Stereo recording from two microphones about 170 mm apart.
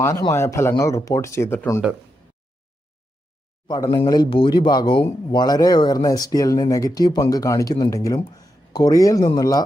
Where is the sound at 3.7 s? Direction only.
25° left (ahead or behind).